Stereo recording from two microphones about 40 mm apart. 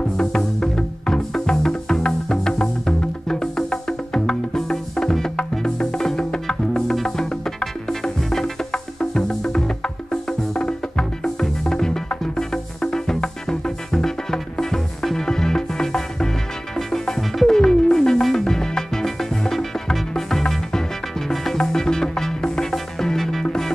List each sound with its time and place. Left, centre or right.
0.2 s music: centre